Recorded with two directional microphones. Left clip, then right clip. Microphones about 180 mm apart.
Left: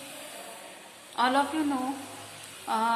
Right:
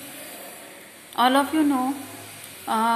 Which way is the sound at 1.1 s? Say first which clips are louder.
Right 6 dB; 10° right (ahead or behind).